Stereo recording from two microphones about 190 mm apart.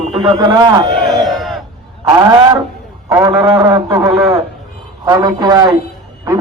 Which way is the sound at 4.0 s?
Centre (ahead or behind).